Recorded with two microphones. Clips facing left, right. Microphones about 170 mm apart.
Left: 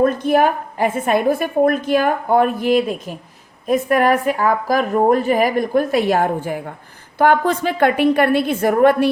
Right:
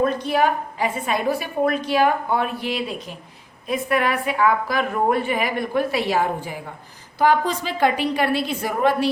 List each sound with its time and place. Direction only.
0.0 s a woman's voice: 50° left (ahead or behind)